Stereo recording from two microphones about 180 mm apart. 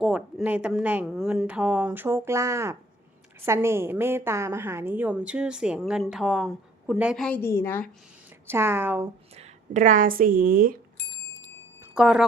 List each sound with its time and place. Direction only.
0.0 s a woman's voice: 5° right (ahead or behind)
7.3 s a woman's voice: 10° left (ahead or behind)
8.4 s a woman's voice: 10° right (ahead or behind)
9.3 s a woman's voice: 40° right (ahead or behind)
11.8 s a sound: 5° right (ahead or behind)